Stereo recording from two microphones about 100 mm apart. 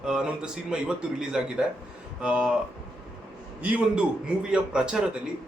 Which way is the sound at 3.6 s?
15° right (ahead or behind).